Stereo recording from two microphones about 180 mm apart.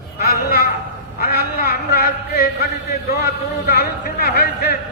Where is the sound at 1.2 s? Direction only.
60° left (ahead or behind).